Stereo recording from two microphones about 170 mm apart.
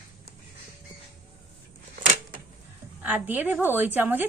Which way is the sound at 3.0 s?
10° right (ahead or behind).